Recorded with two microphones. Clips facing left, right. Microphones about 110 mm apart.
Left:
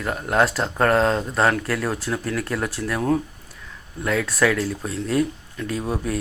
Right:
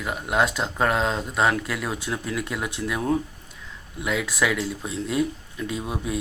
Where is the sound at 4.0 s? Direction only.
5° right (ahead or behind).